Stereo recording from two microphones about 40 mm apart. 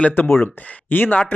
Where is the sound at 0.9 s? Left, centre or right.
Left.